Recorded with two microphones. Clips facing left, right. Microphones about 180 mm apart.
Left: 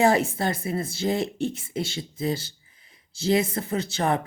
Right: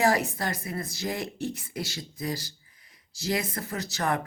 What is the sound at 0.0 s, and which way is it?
Speech, 30° left (ahead or behind).